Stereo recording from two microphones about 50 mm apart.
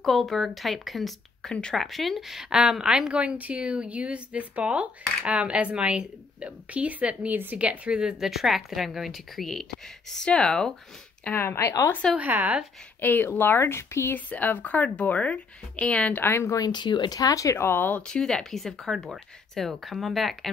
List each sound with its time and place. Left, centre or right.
0.0 s a woman's voice: centre
1.5 s speech: centre
1.8 s a woman's voice: centre
8.3 s a woman's voice: centre
11.3 s speech: left
12.2 s speech: right
13.0 s speech: left
14.1 s speech: left
16.2 s speech: left
17.4 s speech: left
17.6 s speech: left
18.0 s a woman's voice: centre